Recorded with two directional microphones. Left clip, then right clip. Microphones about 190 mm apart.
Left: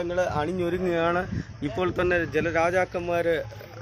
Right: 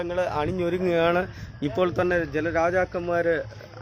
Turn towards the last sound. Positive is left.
turn(degrees=-35)  # may be behind; listen again after turning